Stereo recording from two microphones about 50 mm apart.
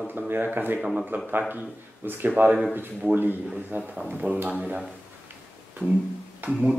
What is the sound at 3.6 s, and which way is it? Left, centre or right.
A man's voice, right.